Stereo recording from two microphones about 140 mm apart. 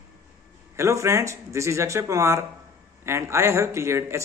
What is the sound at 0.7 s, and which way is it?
A man's voice, 20° right (ahead or behind).